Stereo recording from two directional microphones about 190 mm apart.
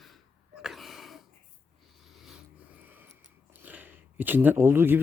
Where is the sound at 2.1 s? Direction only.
Centre (ahead or behind).